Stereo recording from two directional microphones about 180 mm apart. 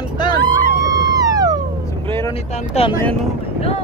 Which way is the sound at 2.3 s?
35° left (ahead or behind).